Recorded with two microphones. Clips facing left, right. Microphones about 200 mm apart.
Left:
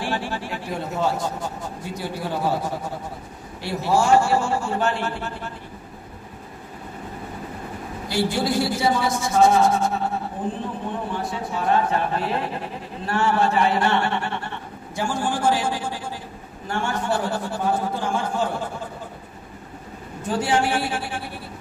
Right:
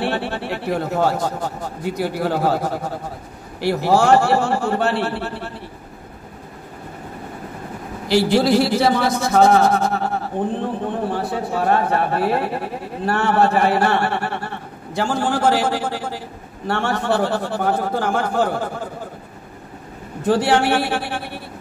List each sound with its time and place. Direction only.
0.0 s a man's voice: 65° right (ahead or behind)
3.6 s speech: 90° right; by 5.5 s 70° right (ahead or behind)
8.1 s speech: 70° right (ahead or behind)
20.2 s speech: 75° right (ahead or behind)